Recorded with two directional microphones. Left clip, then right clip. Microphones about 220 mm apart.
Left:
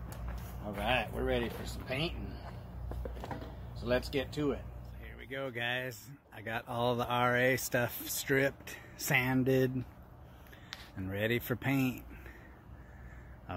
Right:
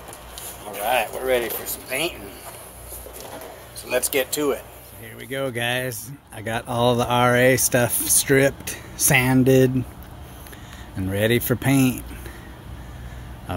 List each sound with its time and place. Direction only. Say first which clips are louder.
0.9 s speech: right 14 dB; 15° right (ahead or behind)
3.9 s speech: right 11 dB; 25° right (ahead or behind)
5.2 s speech: right 12 dB; 5° right (ahead or behind)
11.0 s speech: right 13 dB; 5° right (ahead or behind)
13.5 s a sound: right 12 dB; 5° right (ahead or behind)